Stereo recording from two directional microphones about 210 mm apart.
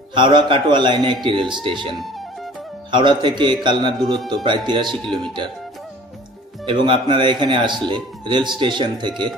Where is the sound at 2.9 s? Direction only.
20° right (ahead or behind).